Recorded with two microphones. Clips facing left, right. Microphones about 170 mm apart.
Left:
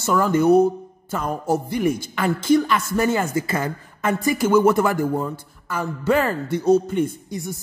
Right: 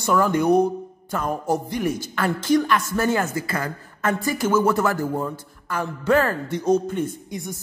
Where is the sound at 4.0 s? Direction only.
10° left (ahead or behind).